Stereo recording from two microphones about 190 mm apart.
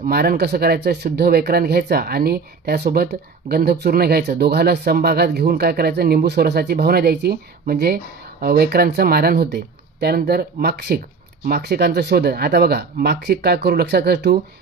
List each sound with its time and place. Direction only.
0.0 s speech: 50° right (ahead or behind)